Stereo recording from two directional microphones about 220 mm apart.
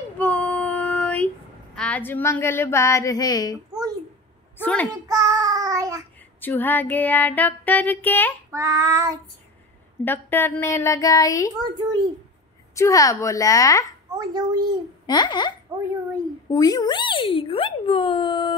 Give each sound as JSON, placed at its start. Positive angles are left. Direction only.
{"t": 0.2, "sound": "child singing", "side_deg": 5}
{"t": 4.6, "sound": "child singing", "side_deg": 5}
{"t": 5.0, "sound": "child singing", "side_deg": -15}
{"t": 6.4, "sound": "child singing", "side_deg": 10}
{"t": 8.5, "sound": "child singing", "side_deg": -15}
{"t": 10.0, "sound": "child singing", "side_deg": 10}
{"t": 11.6, "sound": "a child's voice", "side_deg": -20}
{"t": 12.7, "sound": "child singing", "side_deg": 15}
{"t": 14.1, "sound": "a child's voice", "side_deg": -20}
{"t": 15.0, "sound": "speech", "side_deg": 20}
{"t": 16.5, "sound": "speech", "side_deg": 15}